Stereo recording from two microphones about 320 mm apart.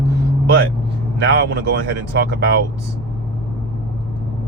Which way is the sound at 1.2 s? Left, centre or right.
Right.